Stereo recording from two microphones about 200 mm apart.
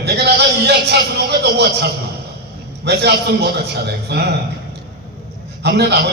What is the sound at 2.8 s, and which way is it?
Music, 55° right (ahead or behind).